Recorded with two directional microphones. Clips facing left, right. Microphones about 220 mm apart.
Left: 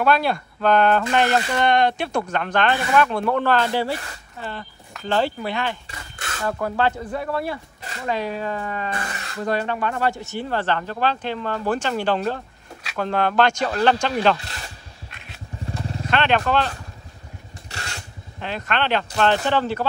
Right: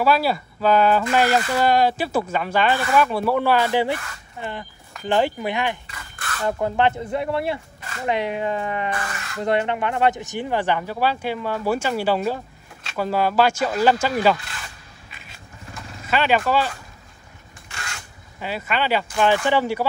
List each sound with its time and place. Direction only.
0.0 s speech: 5° right (ahead or behind)
15.0 s a sound: centre (ahead or behind)
16.1 s speech: 5° right (ahead or behind)
17.6 s vehicle: 35° left (ahead or behind)
18.4 s speech: 5° right (ahead or behind)